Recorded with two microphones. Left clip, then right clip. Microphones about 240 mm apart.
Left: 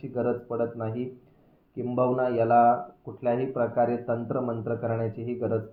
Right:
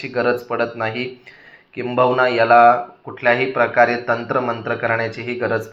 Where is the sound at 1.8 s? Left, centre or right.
Right.